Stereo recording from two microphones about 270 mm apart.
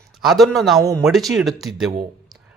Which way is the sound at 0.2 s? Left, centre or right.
Centre.